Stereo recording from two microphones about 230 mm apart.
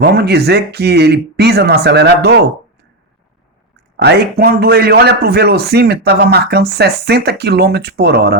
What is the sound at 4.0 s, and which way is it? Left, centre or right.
A man's voice, right.